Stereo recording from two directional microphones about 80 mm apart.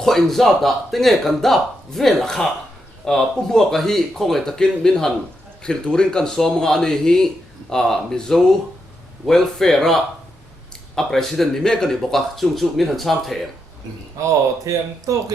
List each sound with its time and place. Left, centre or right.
0.0 s speech: centre
14.2 s speech: right